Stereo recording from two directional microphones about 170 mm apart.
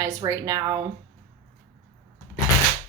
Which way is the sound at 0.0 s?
20° right (ahead or behind).